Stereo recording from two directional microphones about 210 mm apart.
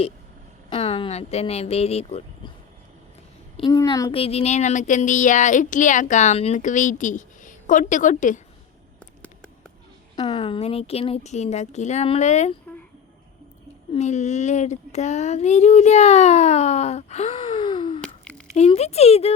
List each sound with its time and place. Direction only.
0.7 s speech: 25° left (ahead or behind)
3.6 s speech: 20° left (ahead or behind); by 8.4 s 35° left (ahead or behind)
10.2 s speech: 25° left (ahead or behind)
13.9 s speech: 35° left (ahead or behind)
18.0 s a sound: 5° left (ahead or behind)
18.5 s speech: 30° left (ahead or behind)